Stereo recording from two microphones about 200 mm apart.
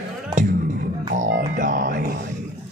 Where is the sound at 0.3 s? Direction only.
40° right (ahead or behind).